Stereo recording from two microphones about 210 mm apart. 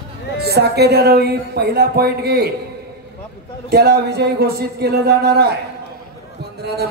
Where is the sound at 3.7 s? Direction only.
50° right (ahead or behind).